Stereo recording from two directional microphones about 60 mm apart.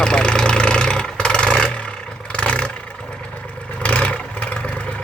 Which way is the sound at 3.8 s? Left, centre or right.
Centre.